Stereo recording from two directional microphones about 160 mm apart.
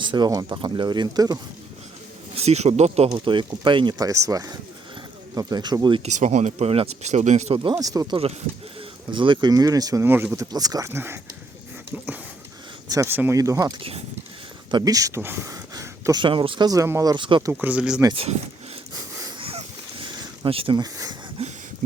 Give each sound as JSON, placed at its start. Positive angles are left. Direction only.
{"t": 0.0, "sound": "speech", "side_deg": -30}
{"t": 2.3, "sound": "speech", "side_deg": -40}
{"t": 3.2, "sound": "speech", "side_deg": -30}
{"t": 6.0, "sound": "speech", "side_deg": -45}
{"t": 12.9, "sound": "speech", "side_deg": -15}
{"t": 16.2, "sound": "speech", "side_deg": -35}
{"t": 17.5, "sound": "speech", "side_deg": -10}
{"t": 19.5, "sound": "a sound", "side_deg": -35}
{"t": 21.4, "sound": "a sound", "side_deg": -40}